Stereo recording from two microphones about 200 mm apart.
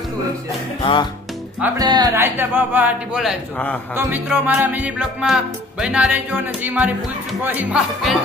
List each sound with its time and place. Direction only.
0.8 s music: 25° left (ahead or behind)
1.8 s speech: 20° right (ahead or behind); by 5.4 s centre (ahead or behind)
5.8 s music: 5° right (ahead or behind)
7.4 s speech: 10° right (ahead or behind)